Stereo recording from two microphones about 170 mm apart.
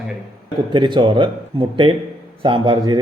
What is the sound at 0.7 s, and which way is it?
A man's voice, 25° right (ahead or behind).